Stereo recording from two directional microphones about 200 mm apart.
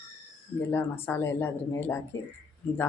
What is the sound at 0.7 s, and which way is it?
Speech, 10° left (ahead or behind).